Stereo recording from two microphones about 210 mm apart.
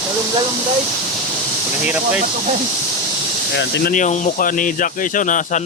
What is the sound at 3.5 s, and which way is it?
Speech, 55° left (ahead or behind).